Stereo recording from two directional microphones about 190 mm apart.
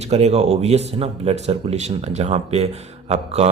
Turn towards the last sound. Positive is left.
turn(degrees=-35)  # may be behind; listen again after turning